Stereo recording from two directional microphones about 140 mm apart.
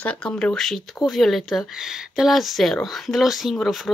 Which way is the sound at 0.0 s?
10° left (ahead or behind).